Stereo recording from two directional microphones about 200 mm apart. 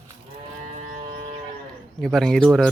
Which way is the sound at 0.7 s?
40° right (ahead or behind).